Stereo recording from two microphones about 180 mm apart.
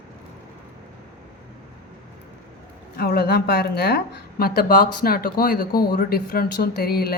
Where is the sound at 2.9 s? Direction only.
60° left (ahead or behind).